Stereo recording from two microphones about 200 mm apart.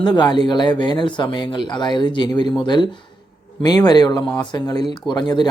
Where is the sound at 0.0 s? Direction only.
20° left (ahead or behind).